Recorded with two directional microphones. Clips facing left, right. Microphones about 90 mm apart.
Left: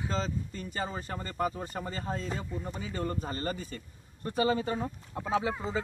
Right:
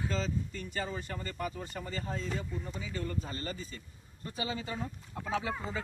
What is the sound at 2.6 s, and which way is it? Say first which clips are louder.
Speech: left 3 dB; 50° left (ahead or behind).